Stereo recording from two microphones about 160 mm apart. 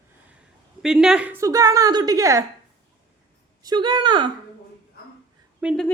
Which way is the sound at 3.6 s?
25° right (ahead or behind).